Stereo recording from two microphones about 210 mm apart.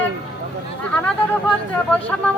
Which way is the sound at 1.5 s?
5° left (ahead or behind).